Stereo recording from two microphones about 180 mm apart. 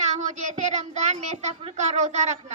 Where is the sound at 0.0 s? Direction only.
40° right (ahead or behind).